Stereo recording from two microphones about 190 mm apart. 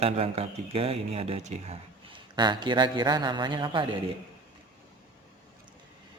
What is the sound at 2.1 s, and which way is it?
A man's voice, 25° right (ahead or behind).